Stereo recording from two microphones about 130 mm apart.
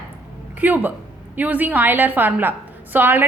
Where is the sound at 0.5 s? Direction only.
15° right (ahead or behind).